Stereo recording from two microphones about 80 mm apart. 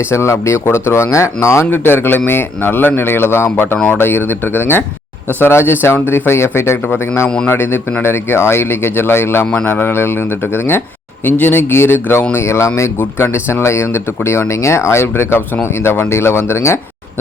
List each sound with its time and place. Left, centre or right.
0.1 s a man's voice: left
6.8 s a man's voice: centre; by 16.8 s left